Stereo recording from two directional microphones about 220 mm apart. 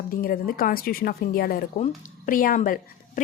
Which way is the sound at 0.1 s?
40° left (ahead or behind).